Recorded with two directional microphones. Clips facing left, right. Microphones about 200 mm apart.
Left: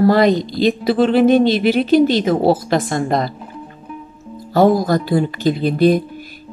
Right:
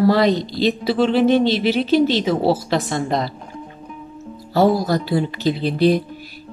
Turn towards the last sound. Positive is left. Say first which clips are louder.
# left 3 dB
turn(degrees=50)  # may be behind; listen again after turning